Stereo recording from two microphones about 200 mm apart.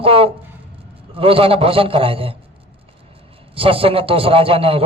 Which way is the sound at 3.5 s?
25° right (ahead or behind).